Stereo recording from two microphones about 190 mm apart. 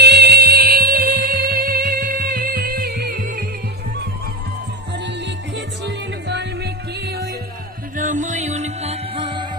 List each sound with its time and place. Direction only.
0.0 s music: 60° right (ahead or behind)
5.0 s music: 70° right (ahead or behind)
7.9 s music: 40° right (ahead or behind); by 9.5 s 25° right (ahead or behind)